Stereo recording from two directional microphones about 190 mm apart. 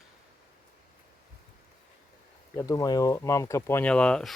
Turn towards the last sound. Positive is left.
turn(degrees=5)  # may be behind; listen again after turning